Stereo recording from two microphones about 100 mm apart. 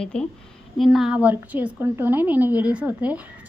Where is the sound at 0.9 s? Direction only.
10° right (ahead or behind).